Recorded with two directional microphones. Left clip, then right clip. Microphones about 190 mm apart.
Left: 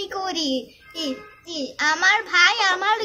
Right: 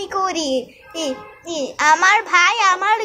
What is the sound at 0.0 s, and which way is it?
A child's voice, 10° left (ahead or behind).